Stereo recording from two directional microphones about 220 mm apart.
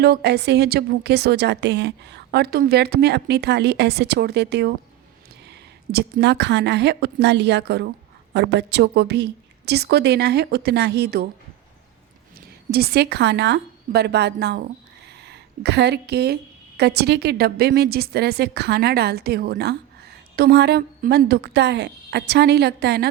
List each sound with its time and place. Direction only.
0.0 s a woman's voice: 45° right (ahead or behind)
12.7 s a woman's voice: 45° right (ahead or behind)